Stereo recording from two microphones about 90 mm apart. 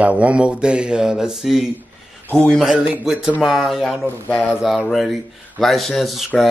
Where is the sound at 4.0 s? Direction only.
20° left (ahead or behind).